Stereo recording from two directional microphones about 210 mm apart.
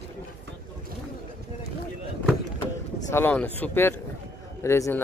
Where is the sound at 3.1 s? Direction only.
10° left (ahead or behind).